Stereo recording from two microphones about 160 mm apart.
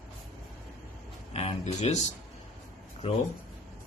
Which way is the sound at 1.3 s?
40° left (ahead or behind).